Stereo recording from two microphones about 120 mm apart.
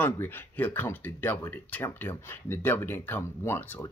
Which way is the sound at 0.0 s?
15° left (ahead or behind).